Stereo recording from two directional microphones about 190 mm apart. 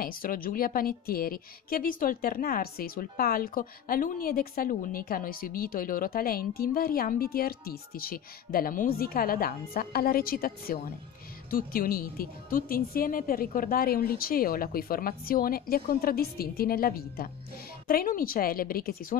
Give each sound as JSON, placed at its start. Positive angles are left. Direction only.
{"t": 0.0, "sound": "a woman's voice", "side_deg": 50}